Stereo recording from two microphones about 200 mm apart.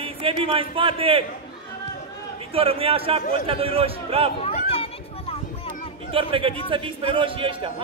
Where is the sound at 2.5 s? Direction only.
30° right (ahead or behind).